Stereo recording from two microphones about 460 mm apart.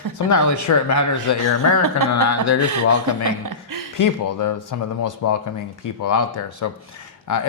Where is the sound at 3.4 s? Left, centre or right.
Right.